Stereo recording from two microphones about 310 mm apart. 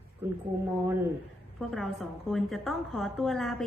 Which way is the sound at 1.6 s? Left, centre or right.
Centre.